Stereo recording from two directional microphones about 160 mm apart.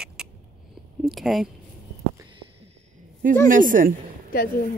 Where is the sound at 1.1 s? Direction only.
Centre (ahead or behind).